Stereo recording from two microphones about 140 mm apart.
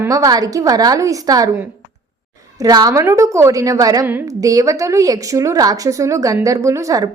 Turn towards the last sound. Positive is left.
turn(degrees=-25)  # may be behind; listen again after turning